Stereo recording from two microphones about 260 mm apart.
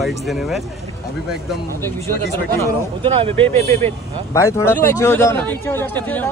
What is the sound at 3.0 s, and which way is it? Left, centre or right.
Speech, right.